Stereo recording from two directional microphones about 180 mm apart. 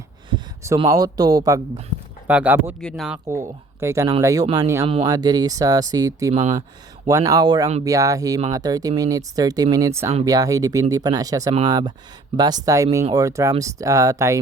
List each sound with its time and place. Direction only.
0.3 s a sound: 20° right (ahead or behind)
0.8 s speech: 20° right (ahead or behind)
2.2 s speech: 10° right (ahead or behind)
2.8 s speech: centre (ahead or behind)
3.2 s speech: 15° right (ahead or behind)
6.3 s speech: 40° right (ahead or behind)
7.1 s speech: 20° right (ahead or behind)